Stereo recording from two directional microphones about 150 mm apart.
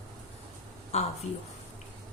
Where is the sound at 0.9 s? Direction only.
45° left (ahead or behind).